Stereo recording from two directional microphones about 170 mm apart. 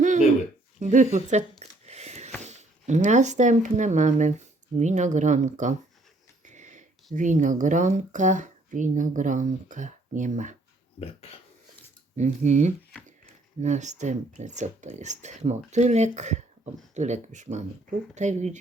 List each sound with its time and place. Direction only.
0.8 s speech: 45° right (ahead or behind)
1.9 s a sound: 40° right (ahead or behind)
2.4 s speech: 45° right (ahead or behind)
11.0 s speech: 35° left (ahead or behind)
12.1 s speech: 45° right (ahead or behind)